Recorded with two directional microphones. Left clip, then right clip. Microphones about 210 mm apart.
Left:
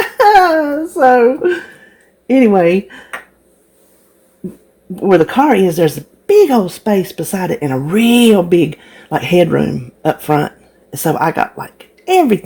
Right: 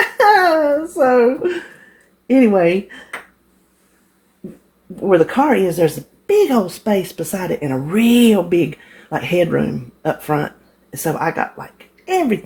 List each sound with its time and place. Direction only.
0.2 s a sound: 35° left (ahead or behind)
2.2 s speech: 35° left (ahead or behind)
4.9 s a woman's voice: 40° left (ahead or behind)